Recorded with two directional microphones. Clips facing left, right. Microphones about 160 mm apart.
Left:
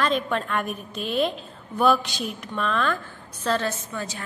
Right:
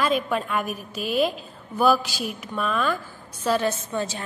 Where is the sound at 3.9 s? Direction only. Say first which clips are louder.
Right 5 dB; 25° right (ahead or behind).